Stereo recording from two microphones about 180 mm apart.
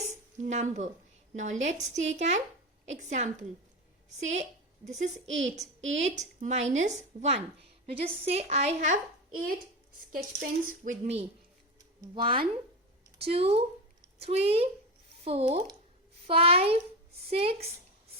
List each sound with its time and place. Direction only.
0.1 s a sound: 40° right (ahead or behind)
1.4 s speech: 40° right (ahead or behind)
10.1 s a woman's voice: 50° right (ahead or behind)
11.8 s a woman's voice: 25° right (ahead or behind)